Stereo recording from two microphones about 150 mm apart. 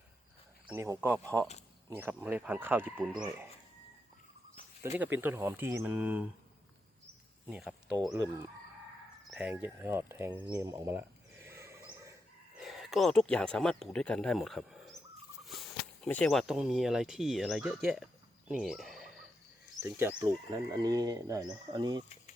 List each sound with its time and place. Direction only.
0.7 s speech: 15° right (ahead or behind)
4.9 s speech: 15° right (ahead or behind)
7.4 s speech: 5° right (ahead or behind)
7.9 s speech: 25° right (ahead or behind)
9.3 s speech: 10° right (ahead or behind)
12.6 s speech: centre (ahead or behind)
19.8 s speech: 15° right (ahead or behind)
20.1 s speech: 25° right (ahead or behind)